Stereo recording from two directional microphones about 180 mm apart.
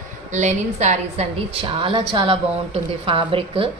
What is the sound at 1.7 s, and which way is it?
A woman's voice, 30° right (ahead or behind).